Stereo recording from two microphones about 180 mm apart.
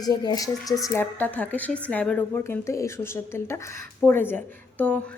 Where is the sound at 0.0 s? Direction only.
20° left (ahead or behind).